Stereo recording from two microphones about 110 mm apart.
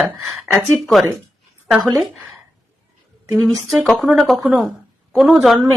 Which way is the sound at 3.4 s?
Centre (ahead or behind).